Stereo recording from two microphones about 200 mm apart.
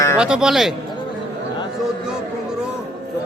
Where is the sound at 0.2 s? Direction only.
5° right (ahead or behind).